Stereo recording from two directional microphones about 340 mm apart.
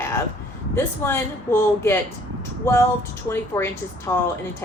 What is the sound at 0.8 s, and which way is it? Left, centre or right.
Speech, centre.